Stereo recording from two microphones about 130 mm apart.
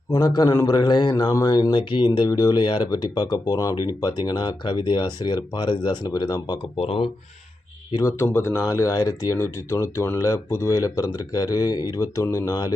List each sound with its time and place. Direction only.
0.1 s a man's voice: 30° left (ahead or behind); by 7.1 s 45° left (ahead or behind)
7.9 s speech: 20° left (ahead or behind)